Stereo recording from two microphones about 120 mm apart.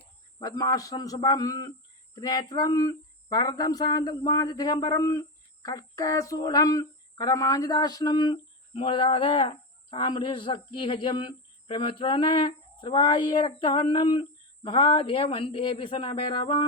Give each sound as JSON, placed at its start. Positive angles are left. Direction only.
{"t": 0.4, "sound": "speech", "side_deg": 35}